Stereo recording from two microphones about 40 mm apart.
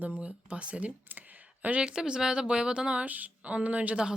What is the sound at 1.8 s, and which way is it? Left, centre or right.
A woman's voice, centre.